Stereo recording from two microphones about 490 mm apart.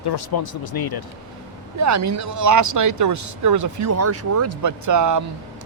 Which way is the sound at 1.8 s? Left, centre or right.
Right.